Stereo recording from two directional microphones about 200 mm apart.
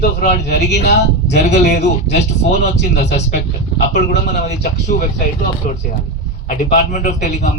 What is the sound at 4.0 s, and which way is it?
Speech, 55° left (ahead or behind).